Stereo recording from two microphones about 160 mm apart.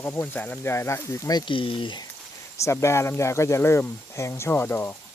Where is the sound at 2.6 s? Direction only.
15° left (ahead or behind).